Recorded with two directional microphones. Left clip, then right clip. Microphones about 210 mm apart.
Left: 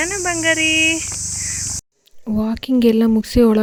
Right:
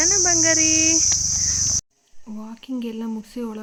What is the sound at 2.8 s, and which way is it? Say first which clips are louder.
Speech: left 19 dB; 50° left (ahead or behind).